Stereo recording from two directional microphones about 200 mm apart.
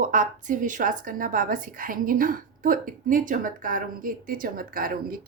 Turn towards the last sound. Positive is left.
turn(degrees=-45)  # may be behind; listen again after turning